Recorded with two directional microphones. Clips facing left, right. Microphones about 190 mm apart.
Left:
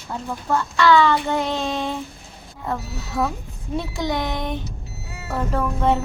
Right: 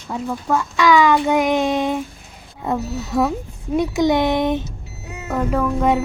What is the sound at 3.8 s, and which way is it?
A child's voice, 20° right (ahead or behind).